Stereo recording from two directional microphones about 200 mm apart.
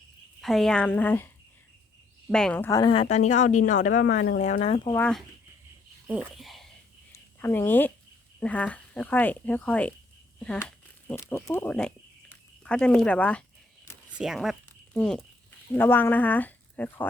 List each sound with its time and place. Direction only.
0.4 s speech: centre (ahead or behind)
2.3 s a woman's voice: 5° left (ahead or behind); by 4.4 s 45° left (ahead or behind)
4.4 s speech: 35° left (ahead or behind)
4.9 s speech: 5° left (ahead or behind)
7.1 s speech: 10° left (ahead or behind)